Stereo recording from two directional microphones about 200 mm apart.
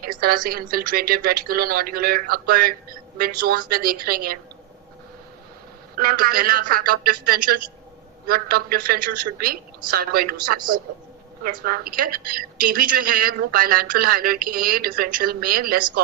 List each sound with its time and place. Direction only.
0.2 s a woman's voice: 45° right (ahead or behind)
6.0 s a woman's voice: 45° right (ahead or behind)
11.6 s a woman's voice: 45° right (ahead or behind)